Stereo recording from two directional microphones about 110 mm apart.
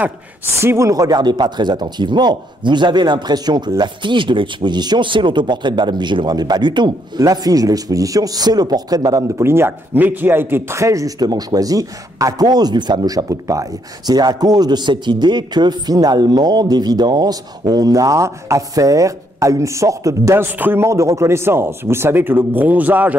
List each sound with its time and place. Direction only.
0.6 s speech: 25° right (ahead or behind)
9.4 s a man's voice: 20° right (ahead or behind)